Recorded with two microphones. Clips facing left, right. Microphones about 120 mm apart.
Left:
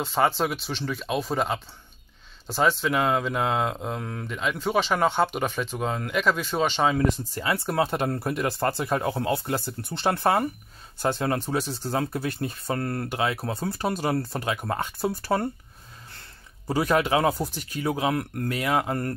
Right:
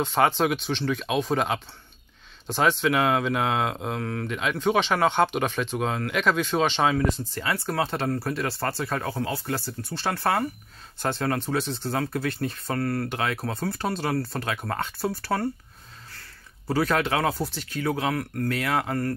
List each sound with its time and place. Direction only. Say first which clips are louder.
0.0 s speech: right 2 dB; 5° left (ahead or behind)
4.0 s speech: right 4 dB; 10° left (ahead or behind)
4.3 s speech: right 2 dB; centre (ahead or behind)
7.4 s speech: left 2 dB; 20° left (ahead or behind)
13.1 s speech: left 1 dB; 5° left (ahead or behind)
16.6 s speech: left 1 dB; 15° left (ahead or behind)